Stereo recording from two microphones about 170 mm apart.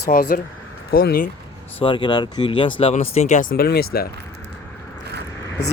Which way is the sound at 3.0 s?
45° left (ahead or behind).